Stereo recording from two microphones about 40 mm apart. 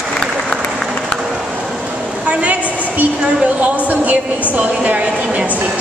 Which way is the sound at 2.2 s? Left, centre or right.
Right.